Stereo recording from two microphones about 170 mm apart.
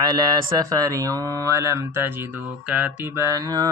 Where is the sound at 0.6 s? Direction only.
20° right (ahead or behind).